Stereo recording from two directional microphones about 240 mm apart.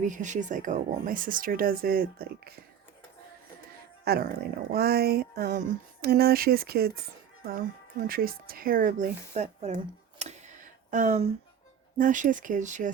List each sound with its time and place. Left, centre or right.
0.0 s speech: right
4.0 s speech: right
8.0 s speech: right
10.2 s tick: right
10.9 s speech: right